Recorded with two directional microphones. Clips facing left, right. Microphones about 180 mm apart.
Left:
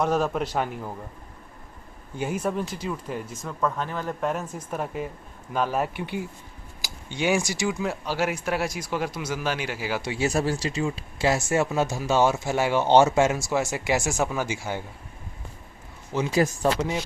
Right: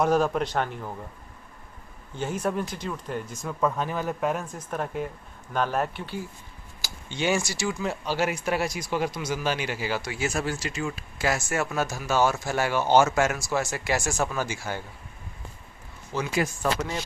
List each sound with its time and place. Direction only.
0.0 s speech: centre (ahead or behind)
2.1 s speech: 10° left (ahead or behind)
3.6 s speech: 10° right (ahead or behind); by 7.7 s 15° left (ahead or behind)
7.7 s speech: 5° left (ahead or behind)
10.0 s speech: 30° left (ahead or behind)
16.1 s speech: 30° left (ahead or behind)